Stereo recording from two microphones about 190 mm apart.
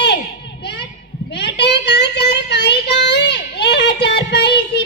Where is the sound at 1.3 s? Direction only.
65° left (ahead or behind).